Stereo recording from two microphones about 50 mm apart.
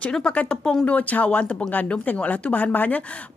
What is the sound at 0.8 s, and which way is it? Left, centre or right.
Speech, left.